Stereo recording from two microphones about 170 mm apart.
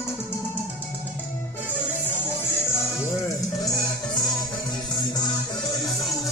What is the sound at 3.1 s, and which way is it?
Music, 20° left (ahead or behind).